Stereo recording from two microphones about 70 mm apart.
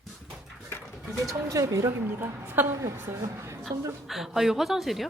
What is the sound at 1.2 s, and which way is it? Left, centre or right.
Speech, right.